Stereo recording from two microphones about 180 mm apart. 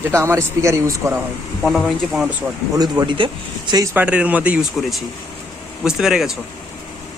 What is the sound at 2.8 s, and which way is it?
Speech, 25° right (ahead or behind).